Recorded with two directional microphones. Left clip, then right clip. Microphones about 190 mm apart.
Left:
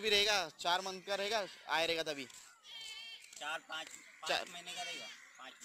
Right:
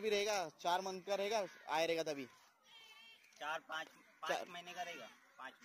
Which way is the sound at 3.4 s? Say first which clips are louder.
Left 1 dB; 5° left (ahead or behind).